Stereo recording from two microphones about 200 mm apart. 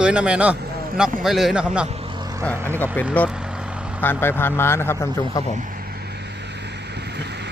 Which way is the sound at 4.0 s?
10° left (ahead or behind).